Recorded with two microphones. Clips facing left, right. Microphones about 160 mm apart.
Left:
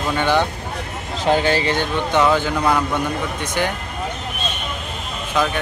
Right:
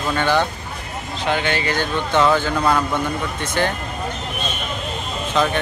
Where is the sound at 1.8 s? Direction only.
15° left (ahead or behind).